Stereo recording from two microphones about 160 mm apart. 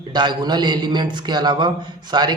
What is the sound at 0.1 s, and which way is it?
A man's voice, 25° right (ahead or behind).